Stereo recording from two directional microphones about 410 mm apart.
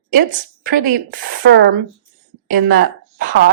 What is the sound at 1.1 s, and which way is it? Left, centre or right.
Speech, right.